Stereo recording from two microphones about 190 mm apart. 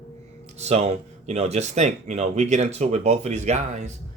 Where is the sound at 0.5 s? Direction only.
35° right (ahead or behind).